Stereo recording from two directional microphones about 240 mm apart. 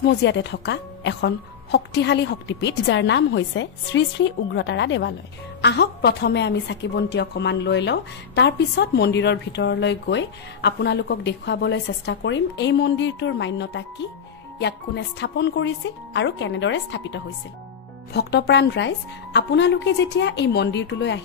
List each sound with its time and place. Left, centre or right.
0.0 s a woman's voice: left